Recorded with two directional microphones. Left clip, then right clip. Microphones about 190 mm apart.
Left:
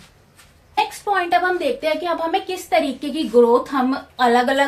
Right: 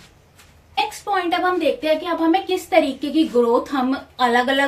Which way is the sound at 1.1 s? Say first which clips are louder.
Left 2 dB; 45° left (ahead or behind).